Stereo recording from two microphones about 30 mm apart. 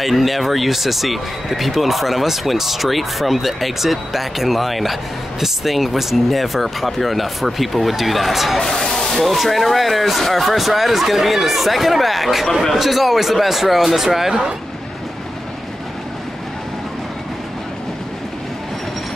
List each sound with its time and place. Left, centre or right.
0.0 s speech: centre
8.6 s speech: centre
9.2 s speech: centre